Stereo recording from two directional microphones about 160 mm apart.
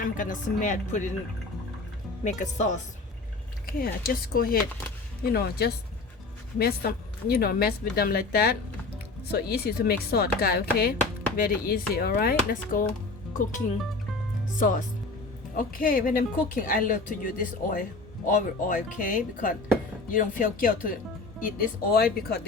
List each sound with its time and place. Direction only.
0.0 s a woman's voice: 55° left (ahead or behind)
2.2 s a woman's voice: 50° left (ahead or behind)
3.7 s a woman's voice: 65° left (ahead or behind)
5.2 s a woman's voice: 75° left (ahead or behind)
14.6 s a woman's voice: 55° left (ahead or behind); by 22.4 s 70° left (ahead or behind)